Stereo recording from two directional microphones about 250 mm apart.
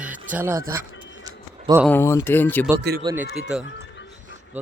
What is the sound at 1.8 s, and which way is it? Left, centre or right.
Speech, centre.